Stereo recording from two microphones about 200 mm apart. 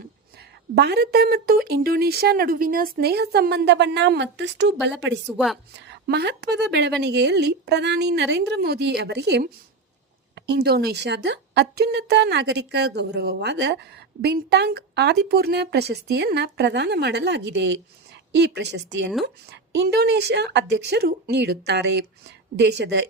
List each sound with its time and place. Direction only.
0.8 s speech: 55° right (ahead or behind)